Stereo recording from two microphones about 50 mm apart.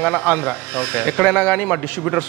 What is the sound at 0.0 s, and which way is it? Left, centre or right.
Speech, left.